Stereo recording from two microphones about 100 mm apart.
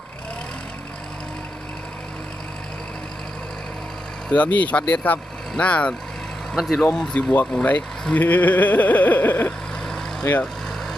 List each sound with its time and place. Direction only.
4.3 s speech: 15° left (ahead or behind)
6.5 s speech: 5° left (ahead or behind); by 9.5 s 20° left (ahead or behind)
9.8 s vehicle: 5° left (ahead or behind)